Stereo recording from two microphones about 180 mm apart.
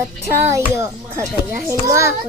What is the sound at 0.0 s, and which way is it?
A child's voice, 15° right (ahead or behind).